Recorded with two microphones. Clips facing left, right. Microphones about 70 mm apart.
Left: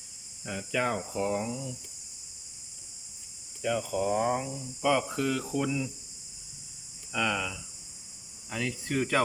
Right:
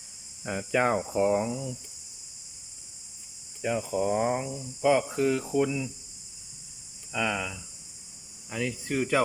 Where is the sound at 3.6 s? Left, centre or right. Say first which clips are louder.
Right 1 dB; right.